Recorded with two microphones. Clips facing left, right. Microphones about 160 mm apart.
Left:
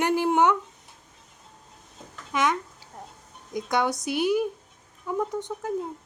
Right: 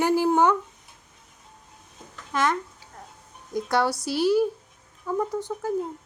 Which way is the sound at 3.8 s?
15° left (ahead or behind).